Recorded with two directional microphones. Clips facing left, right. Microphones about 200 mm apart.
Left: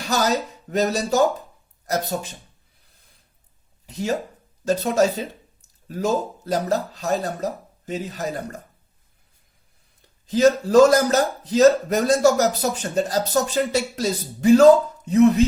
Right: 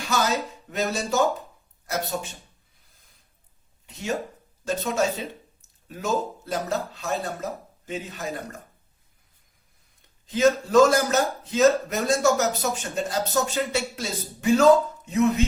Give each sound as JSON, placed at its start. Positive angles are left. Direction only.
{"t": 0.1, "sound": "speech", "side_deg": 40}
{"t": 3.8, "sound": "speech", "side_deg": 35}
{"t": 10.2, "sound": "speech", "side_deg": 35}